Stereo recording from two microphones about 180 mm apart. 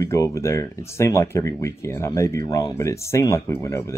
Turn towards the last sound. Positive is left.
turn(degrees=15)  # may be behind; listen again after turning